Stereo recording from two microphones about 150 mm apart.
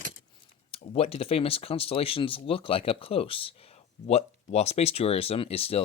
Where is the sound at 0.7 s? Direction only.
40° left (ahead or behind).